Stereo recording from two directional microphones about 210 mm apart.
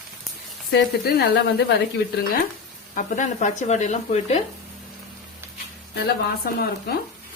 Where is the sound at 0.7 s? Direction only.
50° left (ahead or behind).